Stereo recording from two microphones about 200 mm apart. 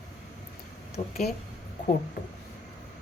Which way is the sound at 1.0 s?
35° left (ahead or behind).